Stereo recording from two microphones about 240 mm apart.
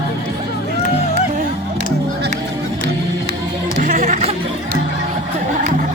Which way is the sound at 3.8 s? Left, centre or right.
Right.